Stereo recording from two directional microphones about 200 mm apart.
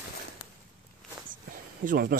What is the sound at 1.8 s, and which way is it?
Speech, 50° right (ahead or behind).